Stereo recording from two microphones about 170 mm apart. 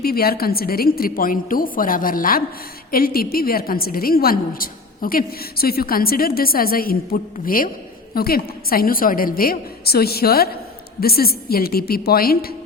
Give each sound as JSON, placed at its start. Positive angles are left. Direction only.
{"t": 0.0, "sound": "a woman's voice", "side_deg": 65}